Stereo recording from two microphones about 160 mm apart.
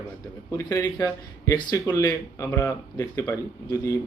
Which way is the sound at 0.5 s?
15° left (ahead or behind).